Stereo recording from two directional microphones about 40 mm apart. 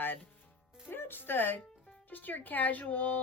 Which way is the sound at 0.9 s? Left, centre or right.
Left.